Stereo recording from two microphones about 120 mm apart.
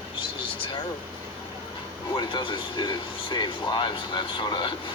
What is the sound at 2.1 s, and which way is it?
Speech, 45° left (ahead or behind).